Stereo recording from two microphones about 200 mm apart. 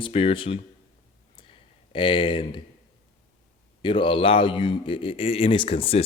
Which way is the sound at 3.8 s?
25° left (ahead or behind).